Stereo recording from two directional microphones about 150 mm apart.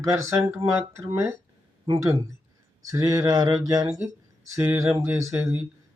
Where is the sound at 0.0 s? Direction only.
20° right (ahead or behind).